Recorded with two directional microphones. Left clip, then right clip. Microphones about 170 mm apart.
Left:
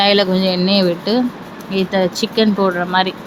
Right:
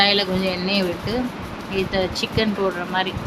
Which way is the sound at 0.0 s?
40° left (ahead or behind).